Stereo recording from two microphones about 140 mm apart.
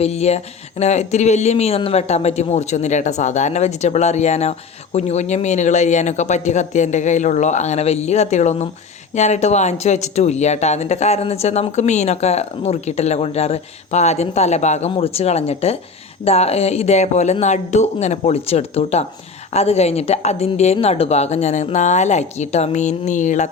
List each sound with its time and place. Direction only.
0.0 s speech: 50° left (ahead or behind)